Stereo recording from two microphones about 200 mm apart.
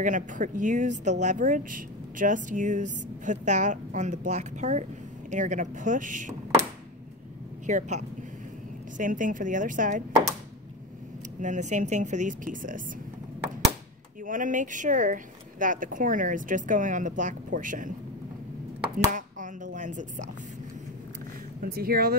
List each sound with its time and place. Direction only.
0.0 s speech: 40° right (ahead or behind)
7.6 s speech: 35° right (ahead or behind)
11.4 s speech: 40° right (ahead or behind)
14.2 s speech: 40° right (ahead or behind)
19.1 s a sound: 40° right (ahead or behind)
21.5 s speech: 50° right (ahead or behind)